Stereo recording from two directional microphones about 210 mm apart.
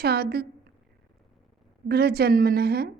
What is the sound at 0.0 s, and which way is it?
Speech, 50° right (ahead or behind).